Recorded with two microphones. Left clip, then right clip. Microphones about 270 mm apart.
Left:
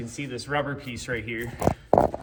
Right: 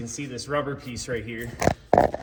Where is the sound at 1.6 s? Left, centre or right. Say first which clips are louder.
Right 2 dB; centre.